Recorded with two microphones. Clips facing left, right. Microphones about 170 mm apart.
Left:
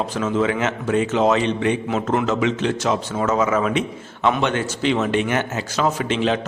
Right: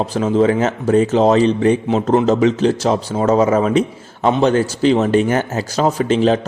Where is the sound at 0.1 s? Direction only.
35° right (ahead or behind).